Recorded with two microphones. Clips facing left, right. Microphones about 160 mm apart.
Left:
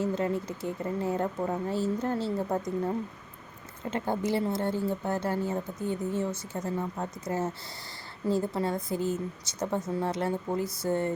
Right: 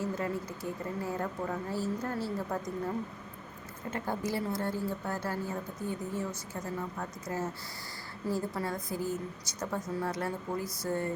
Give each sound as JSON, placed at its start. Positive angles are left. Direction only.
{"t": 0.0, "sound": "a woman's voice", "side_deg": 25}